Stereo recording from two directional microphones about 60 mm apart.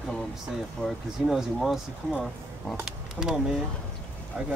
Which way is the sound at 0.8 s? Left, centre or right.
Centre.